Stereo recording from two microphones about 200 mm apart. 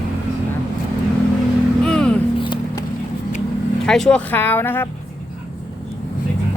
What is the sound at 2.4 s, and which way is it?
Vehicle, 20° left (ahead or behind).